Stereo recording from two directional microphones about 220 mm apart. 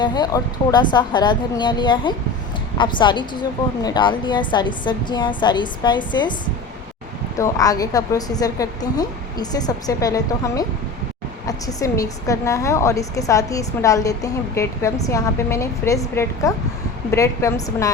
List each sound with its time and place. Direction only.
0.0 s a woman's voice: 20° left (ahead or behind)
7.3 s a woman's voice: 15° left (ahead or behind)